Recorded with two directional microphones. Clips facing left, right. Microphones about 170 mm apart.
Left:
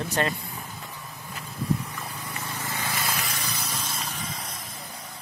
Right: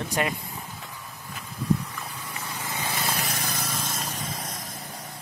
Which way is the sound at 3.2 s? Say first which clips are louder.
Right 2 dB; 40° right (ahead or behind).